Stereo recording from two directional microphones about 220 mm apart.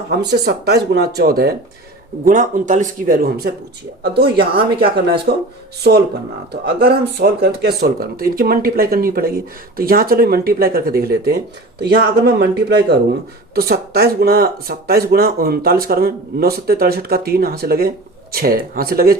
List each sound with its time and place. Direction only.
0.1 s speech: 45° right (ahead or behind)
6.8 s speech: 45° right (ahead or behind)